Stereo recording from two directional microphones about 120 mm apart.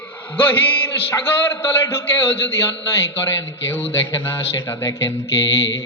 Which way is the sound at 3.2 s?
20° left (ahead or behind).